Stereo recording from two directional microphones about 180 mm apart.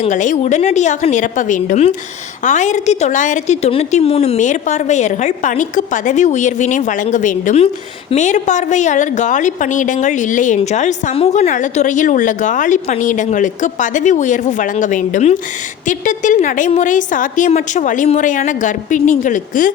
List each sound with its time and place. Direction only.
0.0 s a woman's voice: 45° left (ahead or behind)